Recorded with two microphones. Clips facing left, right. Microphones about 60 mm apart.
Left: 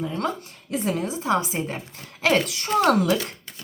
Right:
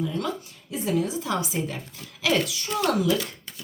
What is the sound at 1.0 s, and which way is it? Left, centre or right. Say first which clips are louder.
Speech: left 4 dB; left.